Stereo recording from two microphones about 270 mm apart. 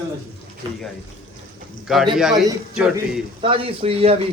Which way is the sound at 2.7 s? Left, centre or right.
Centre.